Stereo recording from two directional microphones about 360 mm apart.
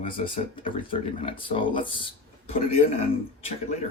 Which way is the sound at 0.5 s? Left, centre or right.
Centre.